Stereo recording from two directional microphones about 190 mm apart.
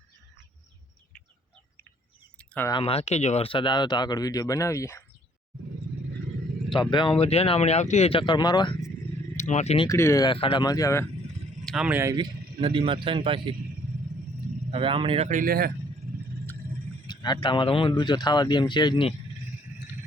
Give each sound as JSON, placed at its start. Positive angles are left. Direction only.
{"t": 2.4, "sound": "a sound", "side_deg": 5}
{"t": 2.6, "sound": "speech", "side_deg": 25}
{"t": 6.7, "sound": "speech", "side_deg": 25}
{"t": 9.4, "sound": "speech", "side_deg": 40}
{"t": 9.8, "sound": "speech", "side_deg": 15}
{"t": 10.3, "sound": "speech", "side_deg": 30}
{"t": 11.6, "sound": "speech", "side_deg": 0}
{"t": 12.1, "sound": "a man's voice", "side_deg": -25}
{"t": 14.7, "sound": "speech", "side_deg": -30}
{"t": 17.1, "sound": "speech", "side_deg": 25}